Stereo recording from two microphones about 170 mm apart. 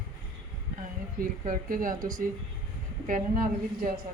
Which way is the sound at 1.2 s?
55° right (ahead or behind).